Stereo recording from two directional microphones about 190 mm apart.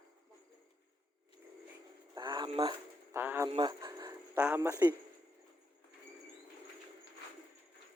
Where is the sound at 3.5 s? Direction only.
25° right (ahead or behind).